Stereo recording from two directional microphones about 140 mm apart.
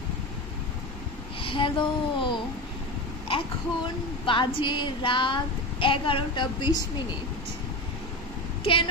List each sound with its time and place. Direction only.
1.4 s speech: 40° left (ahead or behind)